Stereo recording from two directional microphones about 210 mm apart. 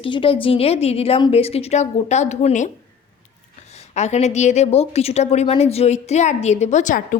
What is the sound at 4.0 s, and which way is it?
A woman's voice, 30° left (ahead or behind).